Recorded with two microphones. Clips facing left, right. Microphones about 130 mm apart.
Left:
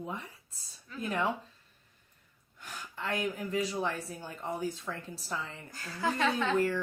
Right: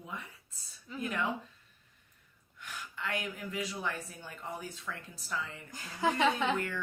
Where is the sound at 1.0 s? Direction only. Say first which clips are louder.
Left 3 dB; 35° left (ahead or behind).